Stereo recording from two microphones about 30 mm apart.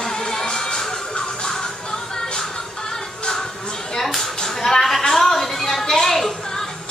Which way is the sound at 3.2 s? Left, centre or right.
Left.